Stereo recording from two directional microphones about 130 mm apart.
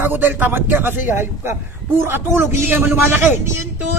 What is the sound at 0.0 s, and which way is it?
Speech, 15° right (ahead or behind).